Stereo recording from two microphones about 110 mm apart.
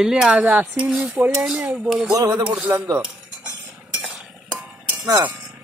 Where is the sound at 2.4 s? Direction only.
15° right (ahead or behind).